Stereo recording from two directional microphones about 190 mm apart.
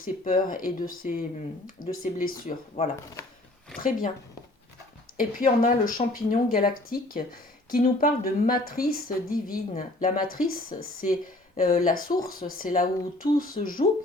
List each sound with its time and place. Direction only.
0.0 s speech: 45° left (ahead or behind)
5.1 s speech: 45° left (ahead or behind)